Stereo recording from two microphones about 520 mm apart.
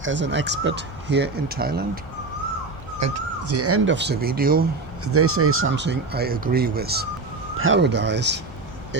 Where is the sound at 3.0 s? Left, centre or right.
Right.